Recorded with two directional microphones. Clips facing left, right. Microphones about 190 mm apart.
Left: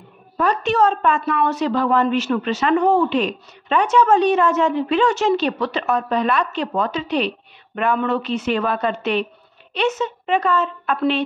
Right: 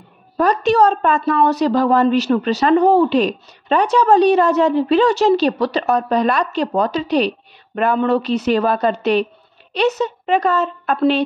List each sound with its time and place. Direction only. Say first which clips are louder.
0.4 s a woman's voice: right 4 dB; 40° right (ahead or behind)